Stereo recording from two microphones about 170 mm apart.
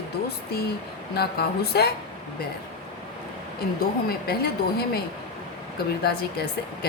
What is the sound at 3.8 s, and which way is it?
A woman's voice, 65° left (ahead or behind).